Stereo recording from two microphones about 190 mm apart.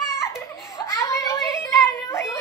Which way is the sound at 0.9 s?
15° left (ahead or behind).